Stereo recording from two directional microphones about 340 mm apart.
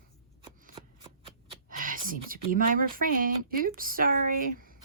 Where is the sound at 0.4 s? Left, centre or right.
Centre.